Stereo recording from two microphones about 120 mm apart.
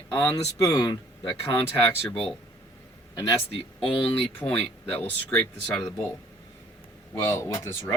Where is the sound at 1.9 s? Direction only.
50° left (ahead or behind).